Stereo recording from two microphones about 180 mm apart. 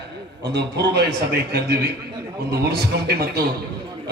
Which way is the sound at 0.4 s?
65° right (ahead or behind).